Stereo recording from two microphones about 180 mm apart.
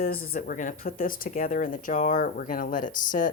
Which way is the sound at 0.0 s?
50° left (ahead or behind).